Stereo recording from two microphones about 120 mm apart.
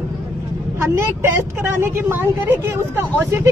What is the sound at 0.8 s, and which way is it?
Speech, 20° right (ahead or behind).